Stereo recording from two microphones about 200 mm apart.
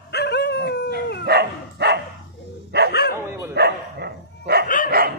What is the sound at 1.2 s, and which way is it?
Dog, 55° right (ahead or behind).